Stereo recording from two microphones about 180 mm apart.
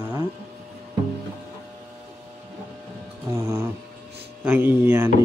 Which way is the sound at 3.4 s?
15° right (ahead or behind).